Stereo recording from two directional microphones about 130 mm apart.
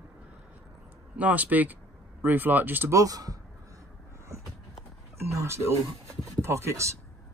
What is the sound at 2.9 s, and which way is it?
Speech, 30° right (ahead or behind).